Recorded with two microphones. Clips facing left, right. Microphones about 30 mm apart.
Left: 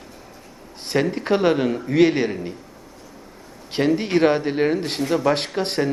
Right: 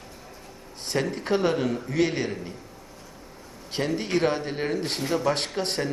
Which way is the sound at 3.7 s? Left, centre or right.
Left.